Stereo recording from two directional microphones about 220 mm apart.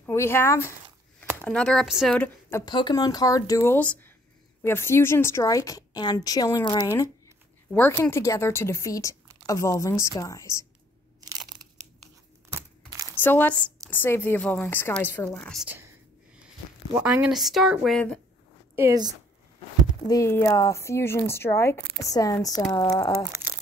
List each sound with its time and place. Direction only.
0.0 s speech: 10° left (ahead or behind)
2.6 s speech: 20° left (ahead or behind)
12.5 s a sound: 15° right (ahead or behind)
13.2 s speech: 10° left (ahead or behind)
17.0 s speech: 5° right (ahead or behind)
18.8 s speech: 15° right (ahead or behind)
20.1 s speech: 15° left (ahead or behind)